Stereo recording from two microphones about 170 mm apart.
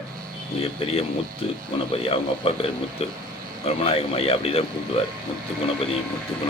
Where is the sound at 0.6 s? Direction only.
35° left (ahead or behind).